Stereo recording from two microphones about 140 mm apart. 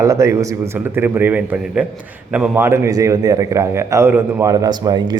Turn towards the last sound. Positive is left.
turn(degrees=-30)  # may be behind; listen again after turning